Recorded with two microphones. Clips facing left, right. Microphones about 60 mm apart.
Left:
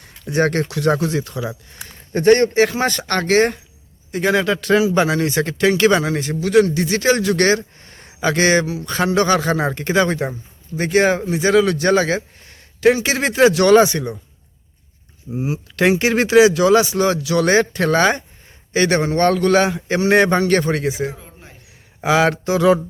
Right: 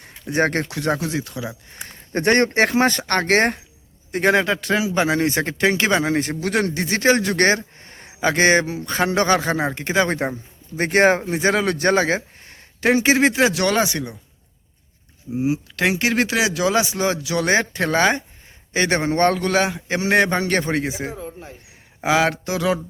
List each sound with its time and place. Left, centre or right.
0.3 s speech: right
0.9 s speech: centre
2.2 s speech: right
2.8 s speech: right
4.4 s speech: centre
5.0 s speech: right
6.1 s speech: right; by 10.1 s centre
10.1 s speech: right
13.1 s speech: centre
15.4 s speech: centre
15.7 s speech: centre; by 19.3 s right
19.3 s speech: centre
20.4 s speech: centre
22.0 s speech: centre